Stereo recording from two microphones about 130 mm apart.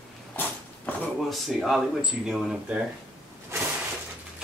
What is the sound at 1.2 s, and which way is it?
Speech, centre (ahead or behind).